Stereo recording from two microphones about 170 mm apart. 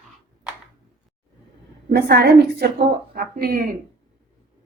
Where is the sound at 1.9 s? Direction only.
70° right (ahead or behind).